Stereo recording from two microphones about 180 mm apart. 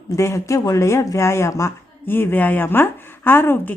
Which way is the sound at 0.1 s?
15° left (ahead or behind).